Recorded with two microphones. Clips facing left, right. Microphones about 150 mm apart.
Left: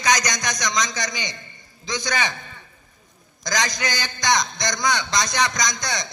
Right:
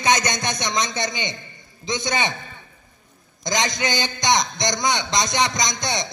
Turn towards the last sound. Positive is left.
turn(degrees=-20)  # may be behind; listen again after turning